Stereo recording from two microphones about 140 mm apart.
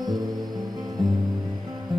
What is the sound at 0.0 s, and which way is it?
Music, 30° right (ahead or behind).